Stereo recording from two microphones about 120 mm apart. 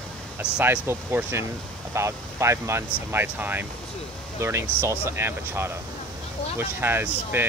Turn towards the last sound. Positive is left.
turn(degrees=-15)  # may be behind; listen again after turning